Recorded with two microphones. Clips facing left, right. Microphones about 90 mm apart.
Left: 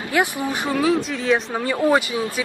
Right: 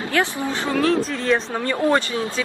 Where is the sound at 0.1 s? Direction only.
15° left (ahead or behind).